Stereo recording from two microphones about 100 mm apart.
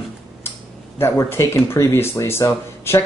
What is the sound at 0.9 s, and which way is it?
Speech, 25° left (ahead or behind).